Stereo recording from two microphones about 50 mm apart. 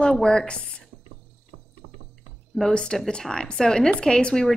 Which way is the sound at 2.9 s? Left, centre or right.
Centre.